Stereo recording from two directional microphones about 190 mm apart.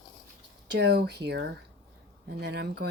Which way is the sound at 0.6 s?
65° right (ahead or behind).